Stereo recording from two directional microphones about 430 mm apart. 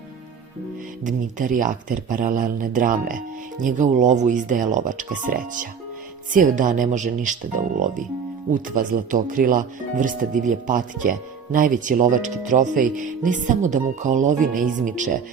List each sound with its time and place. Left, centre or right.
1.0 s speech: centre